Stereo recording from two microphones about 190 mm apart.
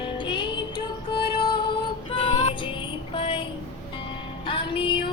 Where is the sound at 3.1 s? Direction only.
25° left (ahead or behind).